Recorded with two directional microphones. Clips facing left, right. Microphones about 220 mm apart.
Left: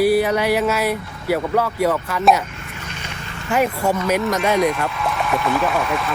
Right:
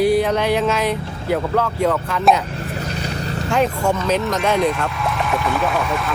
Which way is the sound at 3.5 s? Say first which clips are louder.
Even; 10° left (ahead or behind).